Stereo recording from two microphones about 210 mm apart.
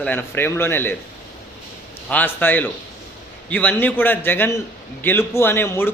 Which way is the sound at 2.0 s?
10° left (ahead or behind).